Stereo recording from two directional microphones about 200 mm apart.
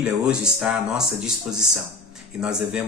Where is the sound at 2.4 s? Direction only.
5° right (ahead or behind).